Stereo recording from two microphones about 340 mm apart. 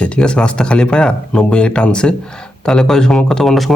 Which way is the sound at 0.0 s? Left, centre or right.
Centre.